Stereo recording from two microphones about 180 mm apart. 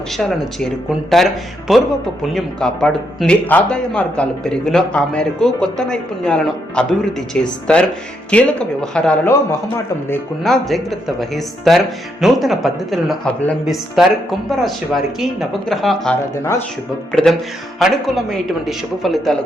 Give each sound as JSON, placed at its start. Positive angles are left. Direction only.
{"t": 0.2, "sound": "a man's voice", "side_deg": 0}
{"t": 10.4, "sound": "a man's voice", "side_deg": 0}
{"t": 16.4, "sound": "speech", "side_deg": 15}
{"t": 17.1, "sound": "a man's voice", "side_deg": 5}